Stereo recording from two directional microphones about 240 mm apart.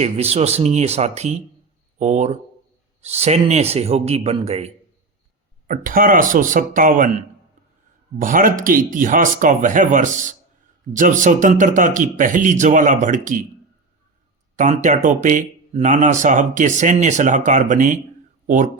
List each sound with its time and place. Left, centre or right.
0.0 s a man's voice: right
8.2 s speech: right
14.5 s speech: right